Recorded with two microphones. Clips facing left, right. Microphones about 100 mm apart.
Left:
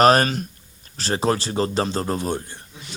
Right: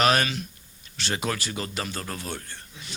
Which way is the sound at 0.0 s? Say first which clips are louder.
Left 7 dB; 40° left (ahead or behind).